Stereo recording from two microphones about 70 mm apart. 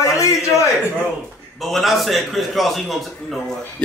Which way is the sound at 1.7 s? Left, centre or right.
Centre.